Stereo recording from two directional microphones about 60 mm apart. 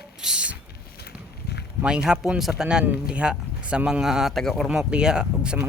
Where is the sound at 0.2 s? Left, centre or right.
Centre.